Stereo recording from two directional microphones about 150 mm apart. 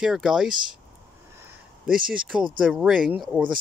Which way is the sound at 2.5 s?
5° right (ahead or behind).